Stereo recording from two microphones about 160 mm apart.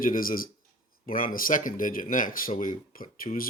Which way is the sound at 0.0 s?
60° left (ahead or behind).